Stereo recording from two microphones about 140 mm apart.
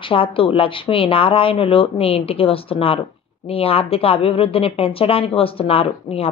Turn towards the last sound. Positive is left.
turn(degrees=45)  # may be behind; listen again after turning